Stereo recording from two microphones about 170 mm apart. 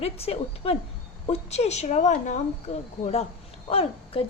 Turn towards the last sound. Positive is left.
turn(degrees=35)  # may be behind; listen again after turning